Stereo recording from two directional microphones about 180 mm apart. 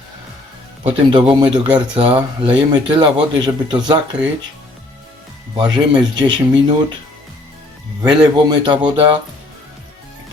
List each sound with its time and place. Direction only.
0.9 s speech: 30° right (ahead or behind)
5.5 s speech: 25° right (ahead or behind)
8.0 s speech: 25° right (ahead or behind)